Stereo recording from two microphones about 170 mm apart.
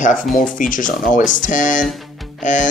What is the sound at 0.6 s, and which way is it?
Speech, 50° left (ahead or behind).